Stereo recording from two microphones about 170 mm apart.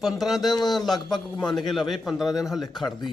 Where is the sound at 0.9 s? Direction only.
25° left (ahead or behind).